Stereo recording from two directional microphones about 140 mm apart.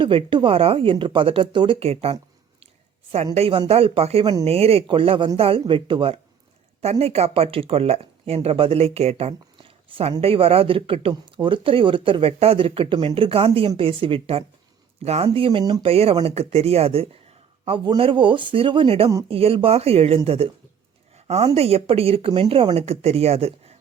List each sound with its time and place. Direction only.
0.0 s speech: 40° right (ahead or behind)
3.3 s speech: 45° right (ahead or behind)
15.9 s speech: 45° right (ahead or behind)